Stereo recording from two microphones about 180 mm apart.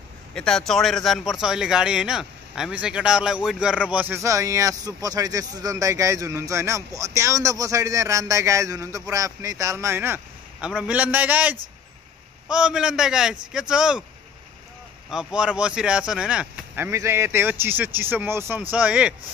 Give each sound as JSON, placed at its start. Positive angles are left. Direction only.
{"t": 0.3, "sound": "a man's voice", "side_deg": 5}
{"t": 15.0, "sound": "speech", "side_deg": -5}